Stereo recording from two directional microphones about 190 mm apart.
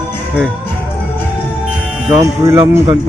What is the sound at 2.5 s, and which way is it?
Speech, 15° right (ahead or behind).